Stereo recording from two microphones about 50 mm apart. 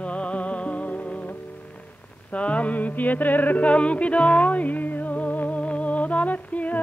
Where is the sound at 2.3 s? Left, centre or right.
Left.